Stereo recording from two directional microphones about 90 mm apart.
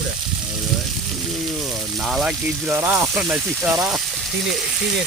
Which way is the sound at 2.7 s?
20° right (ahead or behind).